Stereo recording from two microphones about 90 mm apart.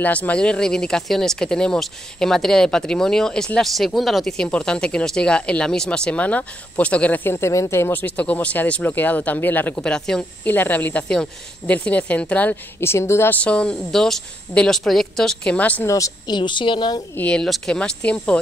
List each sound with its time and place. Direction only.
0.0 s speech: 15° left (ahead or behind)
7.2 s speech: 30° left (ahead or behind)
8.0 s speech: 15° left (ahead or behind)
9.8 s speech: 5° left (ahead or behind)
10.4 s speech: 20° left (ahead or behind)
13.4 s speech: 10° left (ahead or behind)
16.3 s a woman's voice: 60° left (ahead or behind)
17.1 s speech: 15° left (ahead or behind)